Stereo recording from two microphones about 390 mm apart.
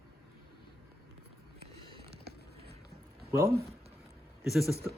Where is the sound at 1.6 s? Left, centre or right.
Centre.